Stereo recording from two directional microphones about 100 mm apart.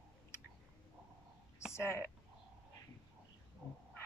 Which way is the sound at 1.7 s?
25° left (ahead or behind).